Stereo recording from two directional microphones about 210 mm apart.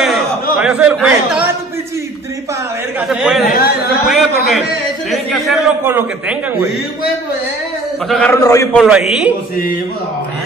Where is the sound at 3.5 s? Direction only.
45° left (ahead or behind).